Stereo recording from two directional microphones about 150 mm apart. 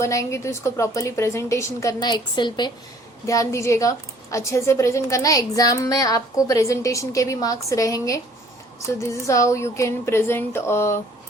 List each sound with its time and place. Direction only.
0.0 s a woman's voice: 20° left (ahead or behind)
2.0 s a woman's voice: 30° left (ahead or behind)
3.2 s a woman's voice: 20° left (ahead or behind)